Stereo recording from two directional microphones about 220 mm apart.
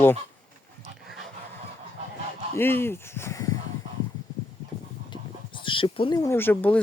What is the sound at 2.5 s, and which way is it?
Speech, 10° left (ahead or behind).